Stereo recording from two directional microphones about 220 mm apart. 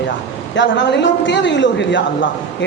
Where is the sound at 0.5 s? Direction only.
55° left (ahead or behind).